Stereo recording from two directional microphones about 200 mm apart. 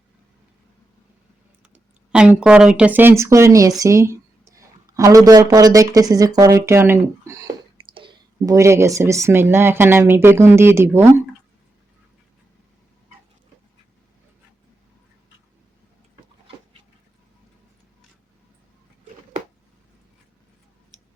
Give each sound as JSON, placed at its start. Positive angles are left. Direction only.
{"t": 1.7, "sound": "speech", "side_deg": -5}
{"t": 7.9, "sound": "speech", "side_deg": -25}